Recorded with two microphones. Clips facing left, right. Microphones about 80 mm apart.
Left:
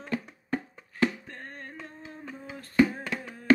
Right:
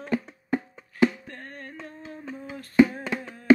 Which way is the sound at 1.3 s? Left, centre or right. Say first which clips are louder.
Right 2 dB; left.